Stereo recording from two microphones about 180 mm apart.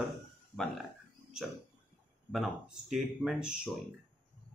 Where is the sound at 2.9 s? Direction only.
5° right (ahead or behind).